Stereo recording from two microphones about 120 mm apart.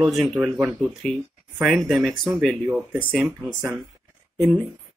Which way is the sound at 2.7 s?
10° right (ahead or behind).